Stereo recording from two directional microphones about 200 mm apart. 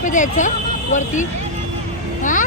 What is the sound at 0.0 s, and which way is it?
Speech, 40° left (ahead or behind).